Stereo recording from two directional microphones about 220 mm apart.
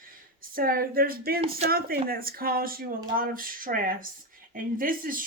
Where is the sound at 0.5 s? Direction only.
40° right (ahead or behind).